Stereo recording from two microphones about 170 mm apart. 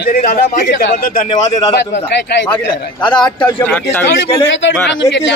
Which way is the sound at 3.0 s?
25° left (ahead or behind).